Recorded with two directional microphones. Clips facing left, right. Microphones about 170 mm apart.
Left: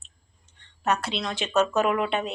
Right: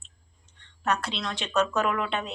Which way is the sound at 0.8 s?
5° left (ahead or behind).